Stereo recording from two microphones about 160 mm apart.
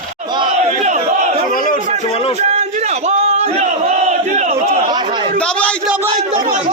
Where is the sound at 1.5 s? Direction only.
60° left (ahead or behind).